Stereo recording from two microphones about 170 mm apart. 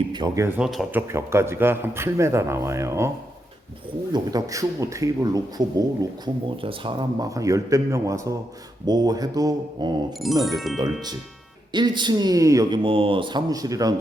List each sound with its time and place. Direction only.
0.1 s speech: 25° right (ahead or behind)
0.4 s speech: 10° right (ahead or behind)
4.1 s speech: 20° right (ahead or behind)
10.2 s music: centre (ahead or behind)
11.7 s speech: 25° right (ahead or behind)